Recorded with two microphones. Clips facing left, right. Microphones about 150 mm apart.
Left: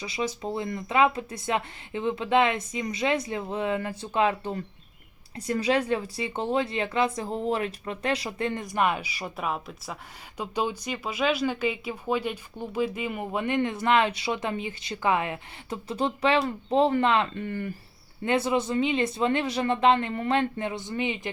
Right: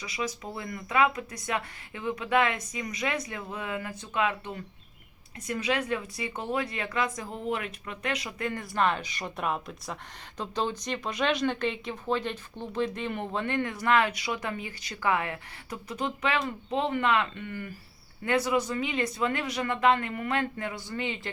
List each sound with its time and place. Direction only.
0.0 s speech: 30° left (ahead or behind)